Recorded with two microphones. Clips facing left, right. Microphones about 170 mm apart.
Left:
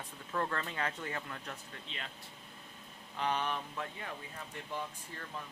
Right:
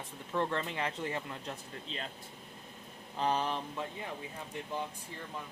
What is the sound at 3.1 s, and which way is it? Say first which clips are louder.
Mantra: right 3 dB; 35° right (ahead or behind).